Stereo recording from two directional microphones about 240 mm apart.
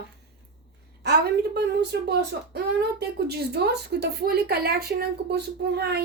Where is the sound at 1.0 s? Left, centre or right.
Right.